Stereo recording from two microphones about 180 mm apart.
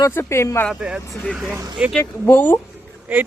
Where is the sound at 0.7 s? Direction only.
5° right (ahead or behind).